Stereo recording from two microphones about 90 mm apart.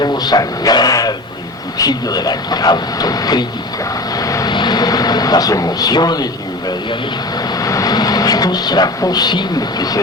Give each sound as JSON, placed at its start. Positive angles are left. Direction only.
{"t": 0.0, "sound": "speech", "side_deg": 50}
{"t": 4.2, "sound": "vehicle", "side_deg": 40}
{"t": 4.5, "sound": "vehicle", "side_deg": 55}
{"t": 7.6, "sound": "speech", "side_deg": 40}